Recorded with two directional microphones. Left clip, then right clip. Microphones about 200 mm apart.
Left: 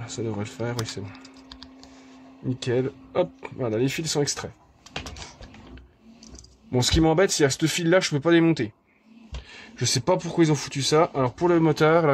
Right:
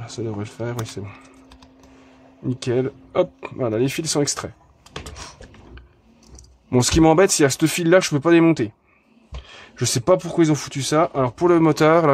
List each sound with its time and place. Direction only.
0.0 s speech: 15° right (ahead or behind)
2.6 s speech: 25° right (ahead or behind)
6.7 s speech: 30° right (ahead or behind)